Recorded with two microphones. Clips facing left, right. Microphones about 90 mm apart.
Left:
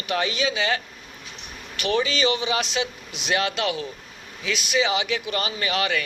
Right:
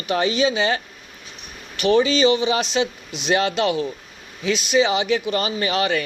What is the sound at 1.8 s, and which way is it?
A man's voice, 30° right (ahead or behind).